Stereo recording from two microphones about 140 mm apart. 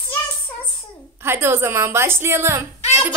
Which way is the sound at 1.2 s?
15° right (ahead or behind).